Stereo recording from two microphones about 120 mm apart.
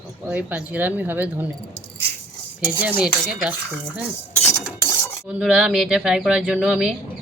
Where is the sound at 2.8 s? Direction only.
10° right (ahead or behind).